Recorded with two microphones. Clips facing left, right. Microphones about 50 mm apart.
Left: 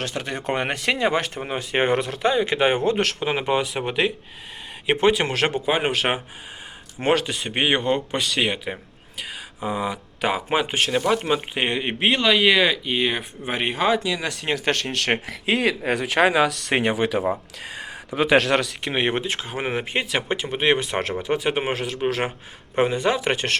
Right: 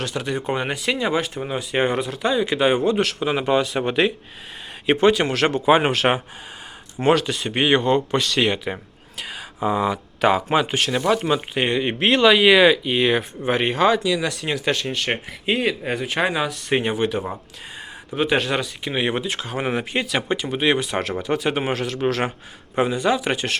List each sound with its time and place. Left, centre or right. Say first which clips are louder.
0.0 s speech: right 2 dB; left
1.4 s speech: right 1 dB; left
1.9 s speech: left 2 dB; left
2.2 s speech: right 1 dB; left
3.2 s speech: right 2 dB; left
3.8 s speech: right 3 dB; centre
4.9 s speech: right 2 dB; left
5.6 s speech: right 5 dB; centre
7.0 s speech: right 3 dB; left
8.4 s speech: right 3 dB; centre
12.1 s speech: right 5 dB; centre
14.0 s speech: right 4 dB; left
14.9 s speech: left 2 dB; left
18.9 s speech: even; left